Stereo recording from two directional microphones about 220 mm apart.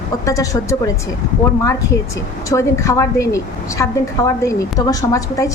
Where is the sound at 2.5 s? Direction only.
15° left (ahead or behind).